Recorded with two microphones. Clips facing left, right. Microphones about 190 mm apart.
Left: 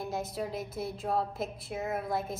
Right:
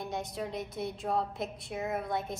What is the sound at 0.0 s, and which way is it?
A woman's voice, centre (ahead or behind).